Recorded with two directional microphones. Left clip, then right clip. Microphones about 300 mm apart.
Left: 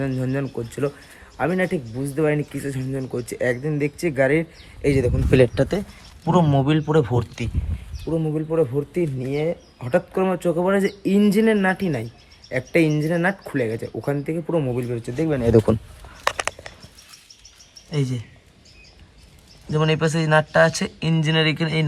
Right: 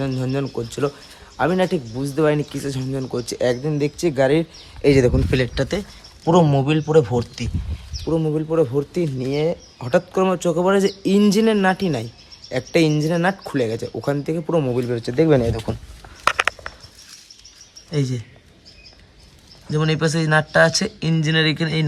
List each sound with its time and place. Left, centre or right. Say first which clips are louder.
0.0 s speech: right 1 dB; centre
5.3 s a man's voice: left 4 dB; centre; by 15.4 s right
16.3 s a sound: right 7 dB; left
17.9 s a man's voice: right 2 dB; centre
19.7 s a man's voice: even; centre